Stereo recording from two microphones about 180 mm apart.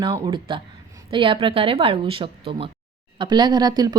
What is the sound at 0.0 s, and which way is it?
Speech, 25° right (ahead or behind).